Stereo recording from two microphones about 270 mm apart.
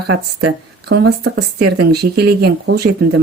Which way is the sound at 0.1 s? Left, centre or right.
Right.